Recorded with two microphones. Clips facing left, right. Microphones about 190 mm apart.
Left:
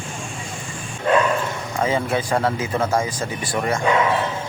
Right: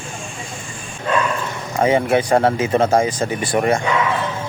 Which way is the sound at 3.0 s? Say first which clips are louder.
Right 5 dB; 80° right.